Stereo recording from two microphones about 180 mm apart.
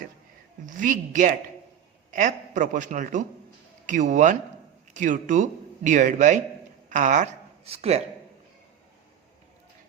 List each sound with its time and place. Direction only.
0.6 s speech: 45° right (ahead or behind)